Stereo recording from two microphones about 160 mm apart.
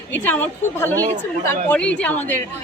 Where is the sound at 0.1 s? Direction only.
10° left (ahead or behind).